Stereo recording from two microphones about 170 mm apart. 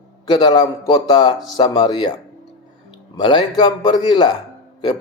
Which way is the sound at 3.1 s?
25° left (ahead or behind).